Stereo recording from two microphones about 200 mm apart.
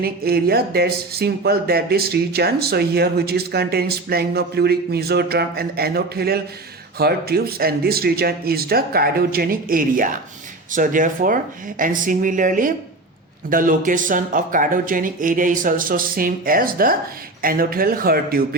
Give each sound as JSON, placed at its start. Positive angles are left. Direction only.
{"t": 0.0, "sound": "a woman's voice", "side_deg": -50}